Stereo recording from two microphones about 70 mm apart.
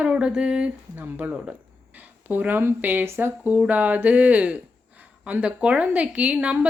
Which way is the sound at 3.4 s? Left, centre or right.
Right.